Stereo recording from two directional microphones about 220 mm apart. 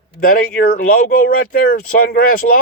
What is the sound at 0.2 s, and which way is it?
Speech, 40° left (ahead or behind).